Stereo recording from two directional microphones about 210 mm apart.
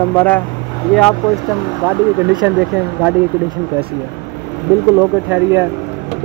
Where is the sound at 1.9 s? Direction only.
10° right (ahead or behind).